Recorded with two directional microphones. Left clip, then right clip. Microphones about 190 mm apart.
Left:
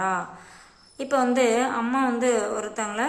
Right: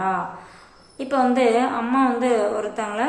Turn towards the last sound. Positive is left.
turn(degrees=25)  # may be behind; listen again after turning